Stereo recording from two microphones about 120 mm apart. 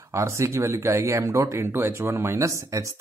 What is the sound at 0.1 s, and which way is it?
Speech, 25° right (ahead or behind).